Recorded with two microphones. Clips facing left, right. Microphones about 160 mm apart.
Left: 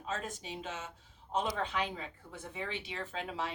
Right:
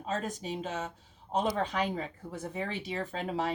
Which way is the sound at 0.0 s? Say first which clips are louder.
Right 5 dB; 40° right (ahead or behind).